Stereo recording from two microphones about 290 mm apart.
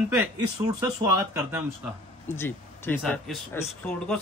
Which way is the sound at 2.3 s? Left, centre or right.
Centre.